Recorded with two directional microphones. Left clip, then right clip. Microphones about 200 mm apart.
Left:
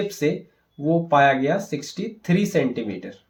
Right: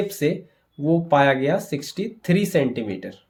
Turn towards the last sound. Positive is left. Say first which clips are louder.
# right 1 dB
turn(degrees=-40)  # may be behind; listen again after turning